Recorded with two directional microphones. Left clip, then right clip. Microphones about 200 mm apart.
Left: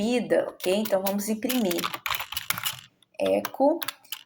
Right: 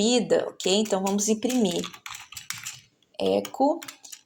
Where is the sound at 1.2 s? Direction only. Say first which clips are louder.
Right 3 dB; 45° right (ahead or behind).